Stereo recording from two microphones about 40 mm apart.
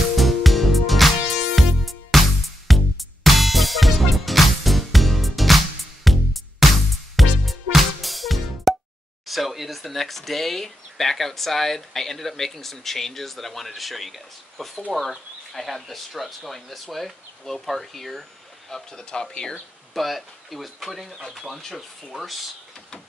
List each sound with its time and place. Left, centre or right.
0.1 s music: centre
9.3 s speech: centre
18.7 s speech: centre
19.9 s speech: centre